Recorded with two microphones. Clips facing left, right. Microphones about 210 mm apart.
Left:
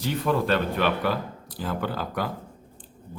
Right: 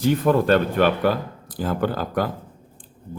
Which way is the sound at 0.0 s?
45° right (ahead or behind).